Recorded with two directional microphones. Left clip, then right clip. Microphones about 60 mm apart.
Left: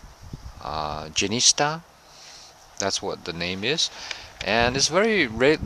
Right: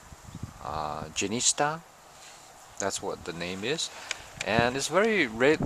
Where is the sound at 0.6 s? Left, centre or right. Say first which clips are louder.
Left 4 dB; left.